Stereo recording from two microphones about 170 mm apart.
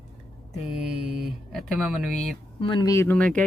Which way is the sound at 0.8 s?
5° right (ahead or behind).